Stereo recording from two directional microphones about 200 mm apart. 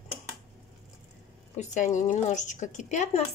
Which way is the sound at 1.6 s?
35° left (ahead or behind).